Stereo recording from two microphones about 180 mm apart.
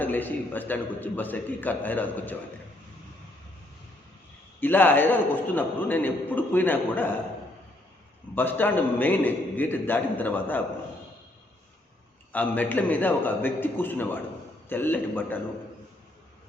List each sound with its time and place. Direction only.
0.0 s a man's voice: 10° left (ahead or behind)
4.6 s a man's voice: 10° left (ahead or behind)
8.4 s a man's voice: 10° left (ahead or behind)
12.3 s a man's voice: 10° left (ahead or behind)